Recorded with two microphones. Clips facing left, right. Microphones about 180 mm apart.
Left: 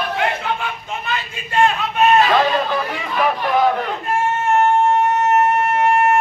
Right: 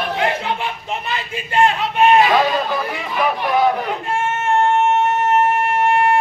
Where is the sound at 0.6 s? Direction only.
25° right (ahead or behind); by 3.7 s 10° right (ahead or behind).